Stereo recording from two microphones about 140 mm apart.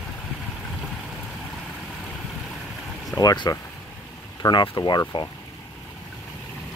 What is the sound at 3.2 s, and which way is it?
Speech, 30° left (ahead or behind).